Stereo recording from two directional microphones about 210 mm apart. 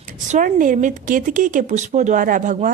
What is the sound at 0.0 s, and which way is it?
Speech, 35° right (ahead or behind).